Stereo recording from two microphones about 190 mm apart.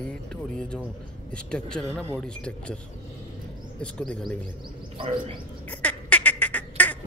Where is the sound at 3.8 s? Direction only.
5° left (ahead or behind).